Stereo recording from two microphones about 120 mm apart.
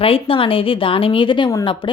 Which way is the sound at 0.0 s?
50° left (ahead or behind).